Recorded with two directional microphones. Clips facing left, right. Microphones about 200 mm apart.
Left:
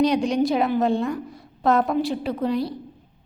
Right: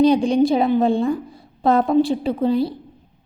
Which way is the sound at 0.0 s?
30° right (ahead or behind).